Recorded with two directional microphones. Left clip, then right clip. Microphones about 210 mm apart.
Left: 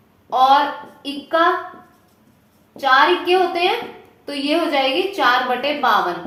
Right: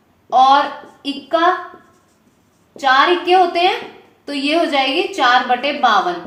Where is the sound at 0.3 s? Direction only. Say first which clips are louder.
Right 4 dB; 20° right (ahead or behind).